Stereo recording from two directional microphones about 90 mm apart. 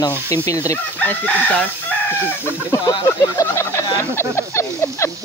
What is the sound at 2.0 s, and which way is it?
Speech, 30° left (ahead or behind).